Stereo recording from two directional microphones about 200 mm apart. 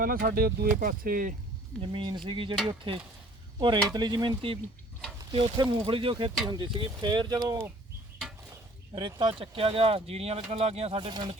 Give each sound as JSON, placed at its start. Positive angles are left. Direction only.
{"t": 0.0, "sound": "speech", "side_deg": -50}
{"t": 1.8, "sound": "speech", "side_deg": -25}
{"t": 9.0, "sound": "speech", "side_deg": -25}